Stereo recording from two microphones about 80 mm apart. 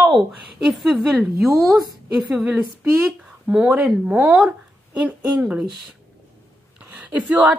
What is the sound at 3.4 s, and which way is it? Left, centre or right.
Speech, centre.